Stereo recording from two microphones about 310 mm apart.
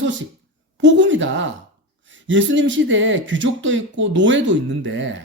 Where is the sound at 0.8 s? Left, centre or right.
Right.